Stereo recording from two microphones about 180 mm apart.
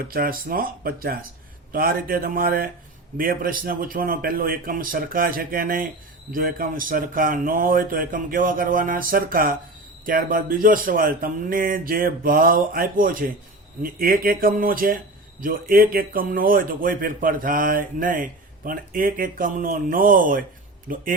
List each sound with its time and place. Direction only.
0.1 s a man's voice: 55° right (ahead or behind)